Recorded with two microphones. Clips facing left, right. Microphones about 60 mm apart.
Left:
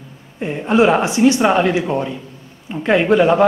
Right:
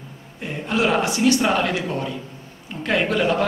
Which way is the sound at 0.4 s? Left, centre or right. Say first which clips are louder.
Left 8 dB; left.